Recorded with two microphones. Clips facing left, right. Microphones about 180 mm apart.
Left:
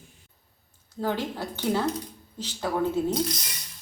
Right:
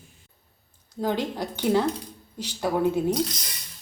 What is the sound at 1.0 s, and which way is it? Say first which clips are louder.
Speech: right 2 dB; 15° right (ahead or behind).